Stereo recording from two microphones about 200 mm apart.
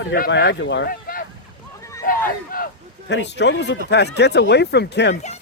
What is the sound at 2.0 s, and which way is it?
Crowd, 45° left (ahead or behind).